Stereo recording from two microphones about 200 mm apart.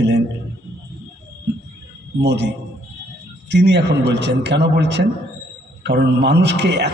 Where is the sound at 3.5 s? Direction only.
60° right (ahead or behind).